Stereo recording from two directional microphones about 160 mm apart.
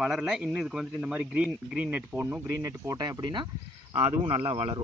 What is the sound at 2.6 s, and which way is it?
Speech, 20° right (ahead or behind).